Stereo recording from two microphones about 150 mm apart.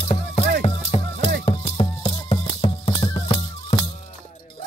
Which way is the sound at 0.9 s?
40° left (ahead or behind).